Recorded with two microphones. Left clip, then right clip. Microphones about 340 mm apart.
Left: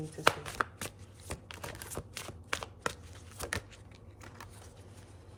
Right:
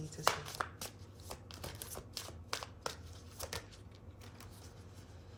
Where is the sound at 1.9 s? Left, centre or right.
Left.